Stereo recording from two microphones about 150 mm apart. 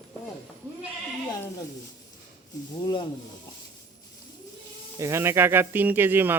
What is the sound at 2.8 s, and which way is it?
Speech, 30° left (ahead or behind).